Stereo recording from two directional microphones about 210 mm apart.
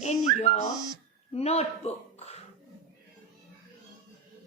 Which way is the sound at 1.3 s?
30° left (ahead or behind).